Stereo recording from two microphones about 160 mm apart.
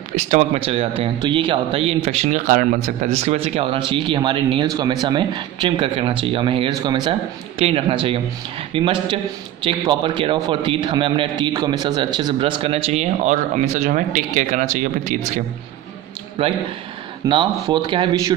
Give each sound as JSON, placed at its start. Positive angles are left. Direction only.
{"t": 0.1, "sound": "a man's voice", "side_deg": -45}
{"t": 17.3, "sound": "a man's voice", "side_deg": -30}